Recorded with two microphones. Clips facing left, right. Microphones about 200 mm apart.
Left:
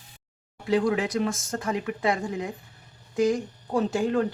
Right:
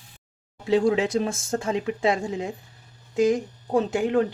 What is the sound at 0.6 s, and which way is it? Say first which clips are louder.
Speech: right 3 dB; 25° right (ahead or behind).